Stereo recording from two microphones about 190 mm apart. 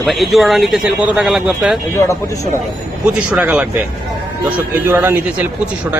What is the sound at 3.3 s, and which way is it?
Speech, 5° right (ahead or behind).